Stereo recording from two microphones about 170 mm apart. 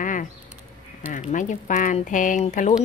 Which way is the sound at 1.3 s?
50° left (ahead or behind).